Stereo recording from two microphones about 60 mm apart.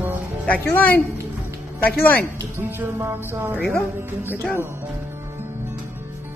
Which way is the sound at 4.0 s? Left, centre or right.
Right.